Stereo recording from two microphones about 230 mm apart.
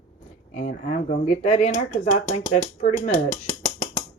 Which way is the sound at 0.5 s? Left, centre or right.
Left.